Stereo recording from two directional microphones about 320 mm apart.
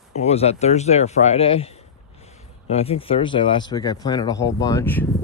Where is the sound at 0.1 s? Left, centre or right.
Centre.